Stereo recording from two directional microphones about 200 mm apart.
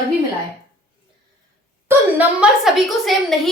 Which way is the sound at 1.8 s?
5° right (ahead or behind).